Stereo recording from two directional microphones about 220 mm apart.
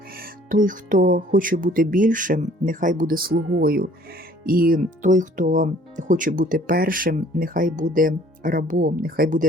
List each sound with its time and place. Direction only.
0.2 s speech: 40° right (ahead or behind)